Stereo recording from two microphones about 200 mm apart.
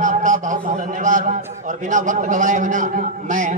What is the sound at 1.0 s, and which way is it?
A man's voice, 40° right (ahead or behind).